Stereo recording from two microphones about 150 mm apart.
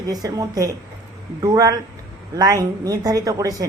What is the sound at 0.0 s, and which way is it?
A woman's voice, 25° right (ahead or behind).